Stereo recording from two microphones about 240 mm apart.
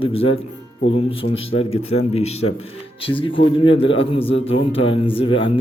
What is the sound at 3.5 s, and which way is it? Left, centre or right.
A man's voice, left.